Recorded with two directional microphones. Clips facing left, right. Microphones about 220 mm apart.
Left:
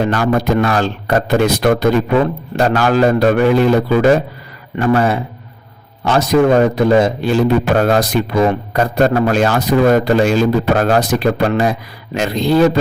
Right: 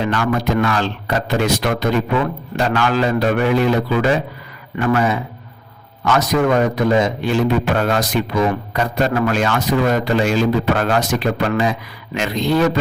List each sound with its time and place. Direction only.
0.0 s a man's voice: 40° left (ahead or behind)
4.8 s a man's voice: 35° left (ahead or behind)